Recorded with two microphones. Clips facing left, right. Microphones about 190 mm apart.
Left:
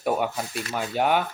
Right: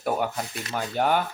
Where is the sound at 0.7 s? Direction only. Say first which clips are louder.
Even; 15° left (ahead or behind).